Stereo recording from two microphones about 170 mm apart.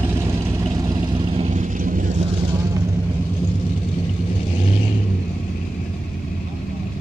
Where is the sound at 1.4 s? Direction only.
45° right (ahead or behind).